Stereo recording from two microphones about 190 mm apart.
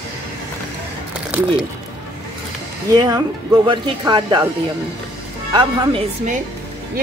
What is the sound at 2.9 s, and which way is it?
Speech, 20° right (ahead or behind).